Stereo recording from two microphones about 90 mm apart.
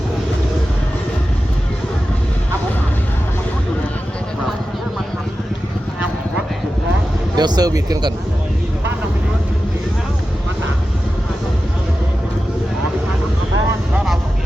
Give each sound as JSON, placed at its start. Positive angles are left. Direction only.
{"t": 7.3, "sound": "speech", "side_deg": -50}